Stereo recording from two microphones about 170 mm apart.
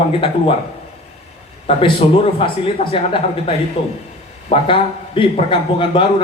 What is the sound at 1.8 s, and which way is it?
A man's voice, 35° left (ahead or behind).